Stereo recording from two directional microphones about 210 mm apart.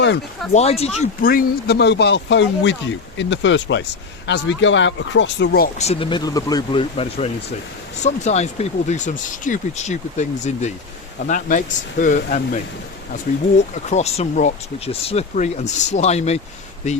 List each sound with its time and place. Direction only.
0.5 s speech: 30° left (ahead or behind)
0.9 s speech: 40° left (ahead or behind)
13.9 s speech: 30° left (ahead or behind)